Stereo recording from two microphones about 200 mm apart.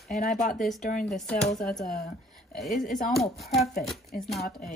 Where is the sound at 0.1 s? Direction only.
40° left (ahead or behind).